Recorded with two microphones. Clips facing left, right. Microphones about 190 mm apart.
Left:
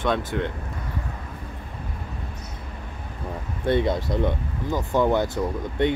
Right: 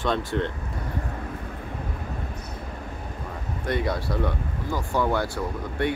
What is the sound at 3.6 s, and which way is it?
Speech, 25° left (ahead or behind).